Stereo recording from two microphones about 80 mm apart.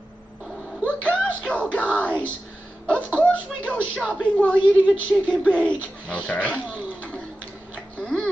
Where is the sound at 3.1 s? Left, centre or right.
Centre.